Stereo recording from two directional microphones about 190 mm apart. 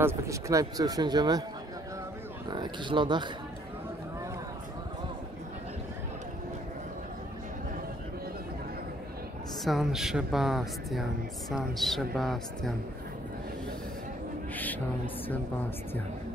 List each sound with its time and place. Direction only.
0.0 s speech: 15° right (ahead or behind)
2.5 s speech: 25° right (ahead or behind)
9.7 s speech: centre (ahead or behind)
14.5 s a sound: 10° left (ahead or behind)